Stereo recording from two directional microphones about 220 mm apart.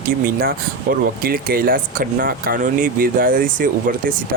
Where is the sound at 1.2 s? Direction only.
40° right (ahead or behind).